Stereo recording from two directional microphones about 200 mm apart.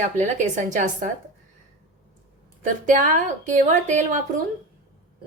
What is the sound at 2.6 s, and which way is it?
A woman's voice, 40° right (ahead or behind).